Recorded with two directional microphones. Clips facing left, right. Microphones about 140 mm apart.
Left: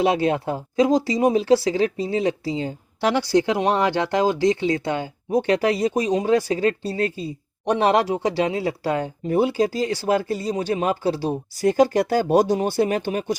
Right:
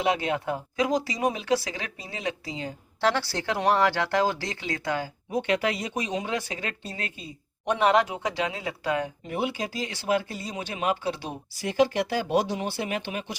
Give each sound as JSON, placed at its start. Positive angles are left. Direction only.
{"t": 0.0, "sound": "speech", "side_deg": 30}
{"t": 3.0, "sound": "speech", "side_deg": 15}
{"t": 5.3, "sound": "speech", "side_deg": 40}